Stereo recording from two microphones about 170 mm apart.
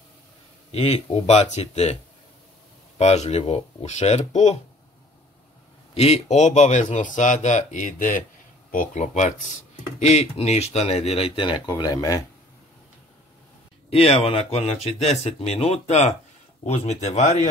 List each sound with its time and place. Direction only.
0.7 s speech: 40° left (ahead or behind)
3.0 s speech: 40° left (ahead or behind)
5.9 s speech: 40° left (ahead or behind); by 12.3 s 20° left (ahead or behind)
13.8 s speech: 35° left (ahead or behind)